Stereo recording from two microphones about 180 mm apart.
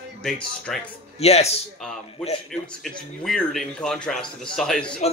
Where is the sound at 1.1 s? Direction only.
35° left (ahead or behind).